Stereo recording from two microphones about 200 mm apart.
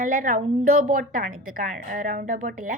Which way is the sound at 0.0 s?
40° right (ahead or behind).